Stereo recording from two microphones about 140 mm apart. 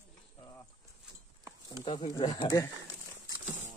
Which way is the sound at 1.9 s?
35° left (ahead or behind).